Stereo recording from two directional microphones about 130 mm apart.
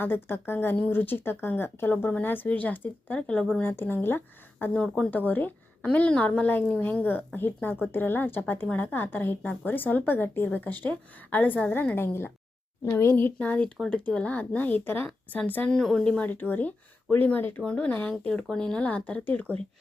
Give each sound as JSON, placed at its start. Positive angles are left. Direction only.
{"t": 0.0, "sound": "a woman's voice", "side_deg": 15}
{"t": 13.7, "sound": "a woman's voice", "side_deg": 0}